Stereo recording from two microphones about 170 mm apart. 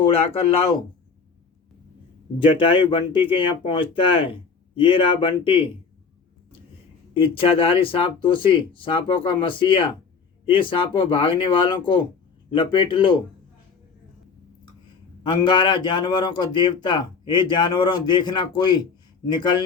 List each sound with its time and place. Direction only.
0.0 s speech: 35° left (ahead or behind)
2.4 s speech: 30° left (ahead or behind)
7.1 s a man's voice: 30° left (ahead or behind)
15.2 s a man's voice: 25° left (ahead or behind)